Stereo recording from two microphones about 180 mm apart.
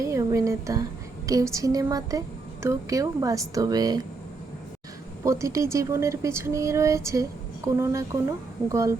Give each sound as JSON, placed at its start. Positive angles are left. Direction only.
{"t": 0.0, "sound": "a sound", "side_deg": -20}
{"t": 1.3, "sound": "speech", "side_deg": -20}
{"t": 5.2, "sound": "speech", "side_deg": -15}